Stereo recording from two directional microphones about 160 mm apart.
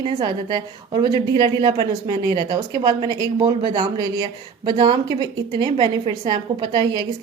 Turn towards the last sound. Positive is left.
turn(degrees=-30)  # may be behind; listen again after turning